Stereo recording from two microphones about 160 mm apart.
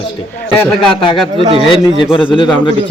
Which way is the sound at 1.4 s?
35° right (ahead or behind).